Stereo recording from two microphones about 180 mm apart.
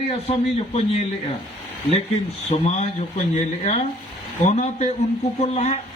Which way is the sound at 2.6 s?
40° left (ahead or behind).